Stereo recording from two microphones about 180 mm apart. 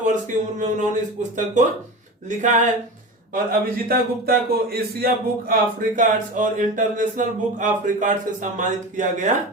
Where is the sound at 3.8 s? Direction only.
55° right (ahead or behind).